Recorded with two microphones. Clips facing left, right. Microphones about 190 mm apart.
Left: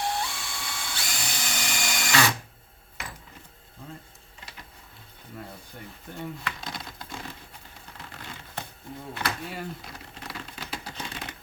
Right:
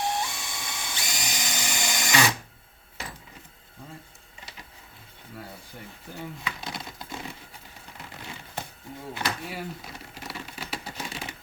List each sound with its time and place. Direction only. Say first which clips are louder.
0.0 s drill: right 1 dB; 20° right (ahead or behind)
6.1 s crumpling: left 1 dB; centre (ahead or behind)
9.2 s a sound: even; 5° right (ahead or behind)